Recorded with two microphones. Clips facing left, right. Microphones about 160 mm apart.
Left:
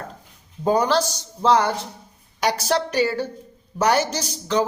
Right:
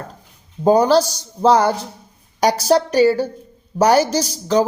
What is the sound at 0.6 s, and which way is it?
Speech, 35° right (ahead or behind).